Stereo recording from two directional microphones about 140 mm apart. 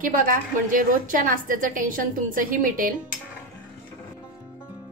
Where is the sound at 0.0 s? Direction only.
75° right (ahead or behind).